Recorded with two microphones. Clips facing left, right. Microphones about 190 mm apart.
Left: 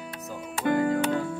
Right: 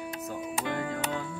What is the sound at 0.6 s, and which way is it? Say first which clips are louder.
Music: left 11 dB; 50° left (ahead or behind).